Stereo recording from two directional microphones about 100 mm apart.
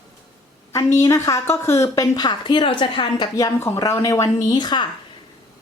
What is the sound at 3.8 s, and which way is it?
Speech, 35° left (ahead or behind).